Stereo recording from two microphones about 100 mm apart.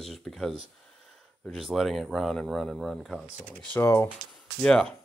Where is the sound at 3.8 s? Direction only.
25° left (ahead or behind).